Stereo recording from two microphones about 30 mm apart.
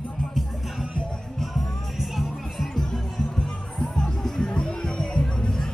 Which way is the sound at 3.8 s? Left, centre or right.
Left.